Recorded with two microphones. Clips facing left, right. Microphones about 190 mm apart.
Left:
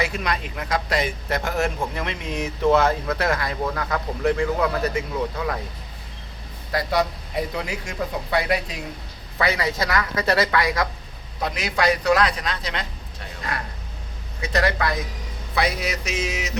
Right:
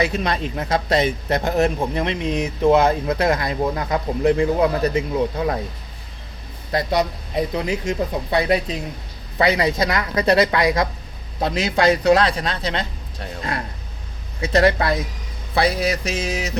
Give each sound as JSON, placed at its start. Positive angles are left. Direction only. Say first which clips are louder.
{"t": 0.0, "sound": "a man's voice", "louder": "right 4 dB", "side_deg": -25}
{"t": 6.7, "sound": "a man's voice", "louder": "right 2 dB", "side_deg": -20}
{"t": 13.4, "sound": "vehicle", "louder": "right 3 dB", "side_deg": -25}
{"t": 14.5, "sound": "a man's voice", "louder": "right 5 dB", "side_deg": -25}
{"t": 15.5, "sound": "music", "louder": "right 5 dB", "side_deg": -30}